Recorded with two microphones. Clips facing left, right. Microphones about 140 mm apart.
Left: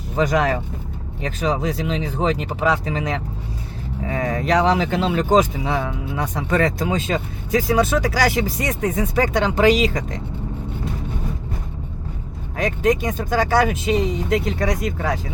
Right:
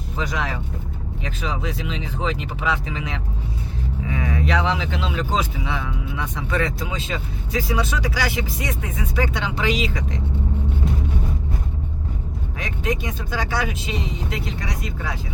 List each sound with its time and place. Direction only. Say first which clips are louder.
0.2 s speech: left 8 dB; 50° left (ahead or behind)
12.5 s speech: left 8 dB; 45° left (ahead or behind)